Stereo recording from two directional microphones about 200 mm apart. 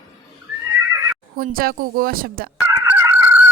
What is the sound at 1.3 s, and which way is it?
A woman's voice, 45° right (ahead or behind).